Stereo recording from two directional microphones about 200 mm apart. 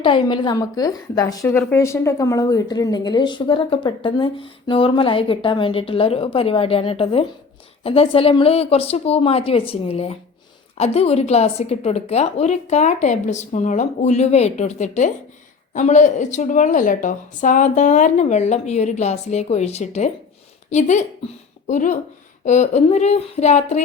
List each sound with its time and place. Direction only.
0.0 s a woman's voice: 25° left (ahead or behind)